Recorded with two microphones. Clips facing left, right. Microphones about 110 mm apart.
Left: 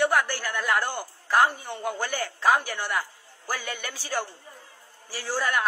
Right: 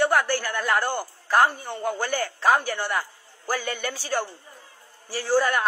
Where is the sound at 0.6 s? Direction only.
35° right (ahead or behind).